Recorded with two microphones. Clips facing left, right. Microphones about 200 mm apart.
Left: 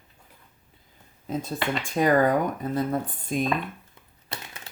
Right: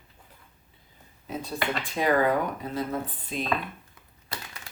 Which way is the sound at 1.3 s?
45° left (ahead or behind).